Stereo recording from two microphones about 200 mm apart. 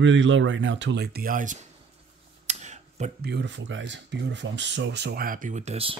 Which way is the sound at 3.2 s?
60° right (ahead or behind).